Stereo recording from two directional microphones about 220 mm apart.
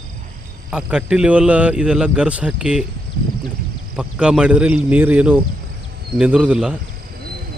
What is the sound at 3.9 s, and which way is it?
A man's voice, 5° right (ahead or behind).